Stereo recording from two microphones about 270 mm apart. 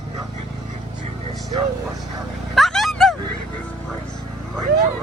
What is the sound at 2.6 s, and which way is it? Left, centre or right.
Vehicle, centre.